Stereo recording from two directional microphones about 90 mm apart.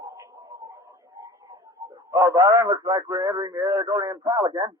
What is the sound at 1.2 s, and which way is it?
A man's voice, 40° right (ahead or behind).